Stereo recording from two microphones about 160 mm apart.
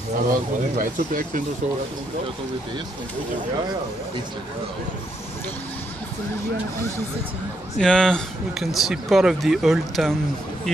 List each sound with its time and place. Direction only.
0.3 s speech: 60° right (ahead or behind)
7.8 s speech: 5° left (ahead or behind)